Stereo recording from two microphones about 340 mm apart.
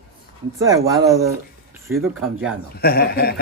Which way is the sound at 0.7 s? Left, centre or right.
Centre.